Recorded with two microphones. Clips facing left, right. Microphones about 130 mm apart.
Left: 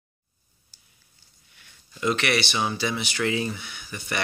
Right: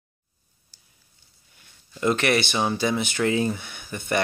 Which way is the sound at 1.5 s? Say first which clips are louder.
Right 4 dB; 40° right (ahead or behind).